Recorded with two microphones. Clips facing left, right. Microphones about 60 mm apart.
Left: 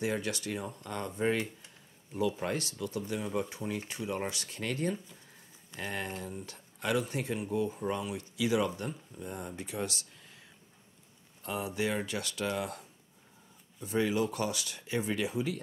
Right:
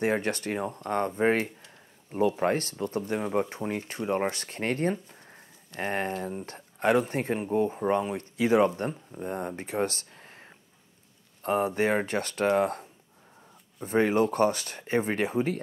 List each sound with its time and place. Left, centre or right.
0.0 s speech: right